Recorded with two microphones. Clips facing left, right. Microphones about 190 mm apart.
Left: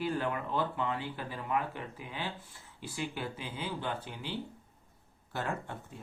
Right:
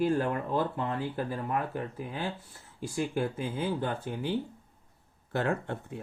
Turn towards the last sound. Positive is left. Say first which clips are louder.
# right 7 dB
turn(degrees=-55)  # may be behind; listen again after turning